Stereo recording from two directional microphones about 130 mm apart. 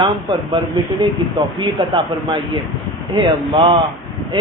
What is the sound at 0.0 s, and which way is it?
Speech, 40° right (ahead or behind).